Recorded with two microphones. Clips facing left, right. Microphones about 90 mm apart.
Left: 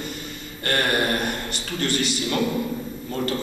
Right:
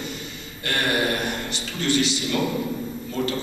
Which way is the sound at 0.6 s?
45° left (ahead or behind).